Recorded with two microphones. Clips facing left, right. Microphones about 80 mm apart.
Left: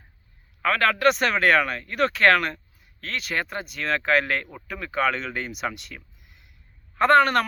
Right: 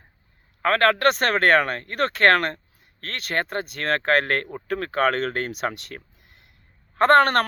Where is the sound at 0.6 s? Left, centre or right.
Right.